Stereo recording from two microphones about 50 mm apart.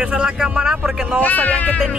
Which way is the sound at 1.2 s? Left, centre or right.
Left.